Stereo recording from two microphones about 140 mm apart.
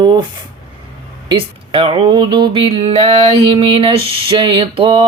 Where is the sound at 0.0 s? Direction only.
30° right (ahead or behind).